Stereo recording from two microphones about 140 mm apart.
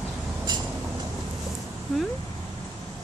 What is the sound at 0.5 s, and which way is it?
Vehicle, 30° right (ahead or behind).